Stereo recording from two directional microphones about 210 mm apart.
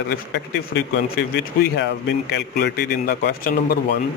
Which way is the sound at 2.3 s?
50° left (ahead or behind).